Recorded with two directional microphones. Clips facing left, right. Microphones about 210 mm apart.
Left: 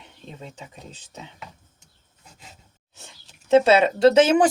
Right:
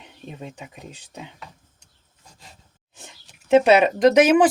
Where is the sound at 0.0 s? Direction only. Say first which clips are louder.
Right 3 dB; 15° right (ahead or behind).